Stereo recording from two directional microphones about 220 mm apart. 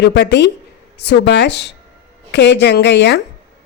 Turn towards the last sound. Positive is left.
turn(degrees=50)  # may be behind; listen again after turning